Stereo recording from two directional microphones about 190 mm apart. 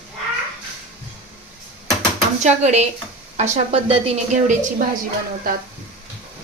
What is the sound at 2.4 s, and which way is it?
A woman's voice, 35° right (ahead or behind).